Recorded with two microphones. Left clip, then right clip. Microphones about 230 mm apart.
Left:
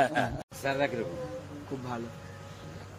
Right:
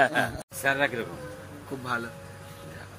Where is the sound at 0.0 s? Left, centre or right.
Centre.